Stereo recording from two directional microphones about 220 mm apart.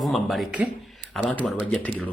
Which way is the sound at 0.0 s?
Centre (ahead or behind).